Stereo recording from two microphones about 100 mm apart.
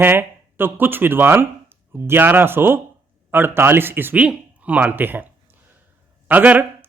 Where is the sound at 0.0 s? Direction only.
20° right (ahead or behind).